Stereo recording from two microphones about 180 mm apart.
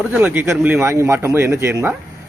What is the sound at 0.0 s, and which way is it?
Speech, 10° right (ahead or behind).